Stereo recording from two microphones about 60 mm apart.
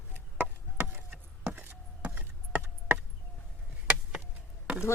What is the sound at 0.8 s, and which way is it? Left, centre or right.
Chop, right.